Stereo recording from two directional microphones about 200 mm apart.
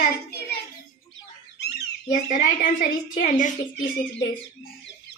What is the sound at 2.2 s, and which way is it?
A woman's voice, 40° left (ahead or behind).